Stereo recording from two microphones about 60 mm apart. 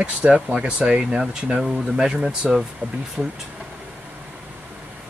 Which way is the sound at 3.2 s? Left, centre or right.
Right.